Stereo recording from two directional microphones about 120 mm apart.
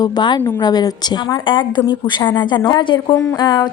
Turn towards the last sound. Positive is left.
turn(degrees=40)  # may be behind; listen again after turning